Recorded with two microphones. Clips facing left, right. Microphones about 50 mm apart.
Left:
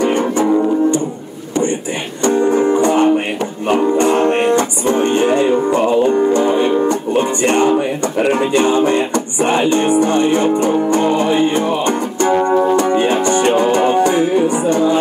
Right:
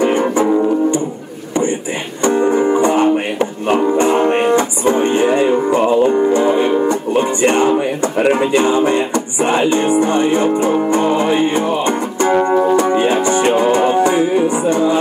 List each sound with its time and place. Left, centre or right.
0.0 s music: centre
2.2 s music: centre